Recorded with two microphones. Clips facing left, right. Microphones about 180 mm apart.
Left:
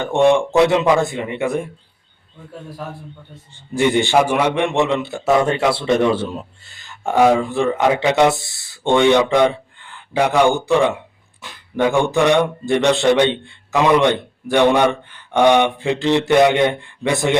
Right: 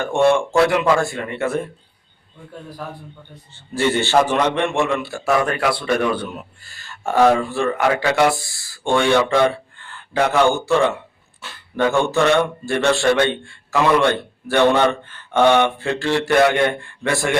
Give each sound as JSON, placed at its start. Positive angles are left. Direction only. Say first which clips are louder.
{"t": 0.0, "sound": "speech", "louder": "left 2 dB", "side_deg": 20}
{"t": 2.6, "sound": "a man's voice", "louder": "left 1 dB", "side_deg": 0}
{"t": 3.7, "sound": "a man's voice", "louder": "left 2 dB", "side_deg": 15}